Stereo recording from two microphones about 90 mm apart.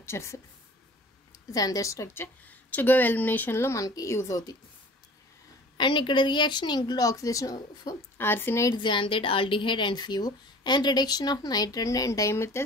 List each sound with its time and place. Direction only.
0.0 s speech: 30° left (ahead or behind)
1.5 s a woman's voice: 45° left (ahead or behind)
2.7 s speech: 20° left (ahead or behind)
5.8 s a woman's voice: 60° left (ahead or behind); by 7.9 s 45° left (ahead or behind)
8.2 s speech: 25° left (ahead or behind)
8.7 s a woman's voice: 65° left (ahead or behind); by 12.6 s 30° left (ahead or behind)